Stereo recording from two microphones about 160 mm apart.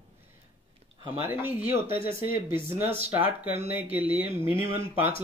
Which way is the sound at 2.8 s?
40° right (ahead or behind).